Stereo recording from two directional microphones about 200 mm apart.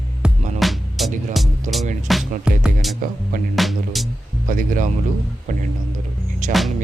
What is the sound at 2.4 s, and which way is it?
Speech, 5° right (ahead or behind).